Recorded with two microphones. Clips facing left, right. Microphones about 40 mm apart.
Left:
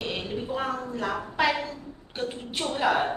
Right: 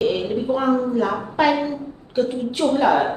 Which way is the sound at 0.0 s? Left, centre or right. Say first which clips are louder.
Right 11 dB; centre.